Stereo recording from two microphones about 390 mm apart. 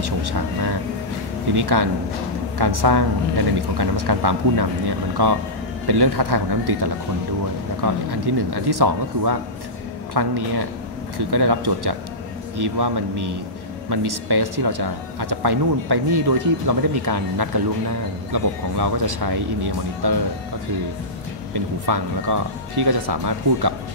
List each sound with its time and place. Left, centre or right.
0.0 s vehicle: right
1.5 s speech: right
21.5 s speech: right